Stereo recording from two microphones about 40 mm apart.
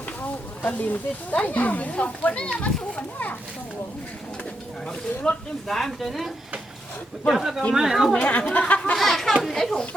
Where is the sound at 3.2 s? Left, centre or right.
Left.